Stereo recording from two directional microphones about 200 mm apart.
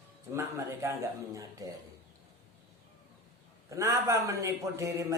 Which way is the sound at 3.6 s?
15° right (ahead or behind).